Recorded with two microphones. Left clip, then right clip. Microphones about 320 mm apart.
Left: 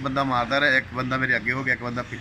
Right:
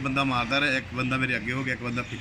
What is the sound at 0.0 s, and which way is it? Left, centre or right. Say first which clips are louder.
A man's voice: left 3 dB; centre.